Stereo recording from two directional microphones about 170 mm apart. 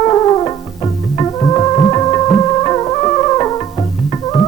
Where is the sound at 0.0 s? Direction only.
20° left (ahead or behind).